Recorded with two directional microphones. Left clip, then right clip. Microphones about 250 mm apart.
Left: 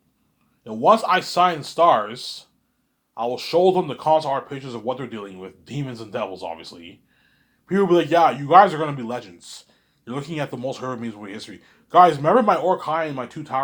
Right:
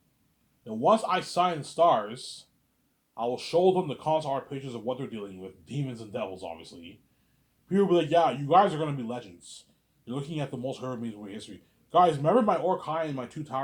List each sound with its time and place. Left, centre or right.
0.6 s speech: centre